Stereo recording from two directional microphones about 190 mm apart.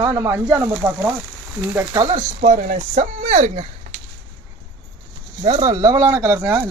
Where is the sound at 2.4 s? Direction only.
35° right (ahead or behind).